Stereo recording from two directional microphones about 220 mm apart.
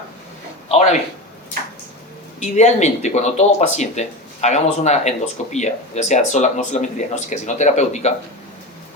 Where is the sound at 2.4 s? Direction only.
30° left (ahead or behind).